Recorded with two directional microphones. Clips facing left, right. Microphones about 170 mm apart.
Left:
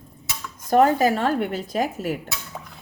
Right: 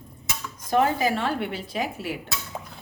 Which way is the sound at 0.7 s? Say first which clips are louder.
Left 5 dB; 45° left (ahead or behind).